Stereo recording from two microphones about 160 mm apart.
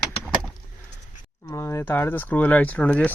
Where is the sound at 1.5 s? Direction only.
15° left (ahead or behind).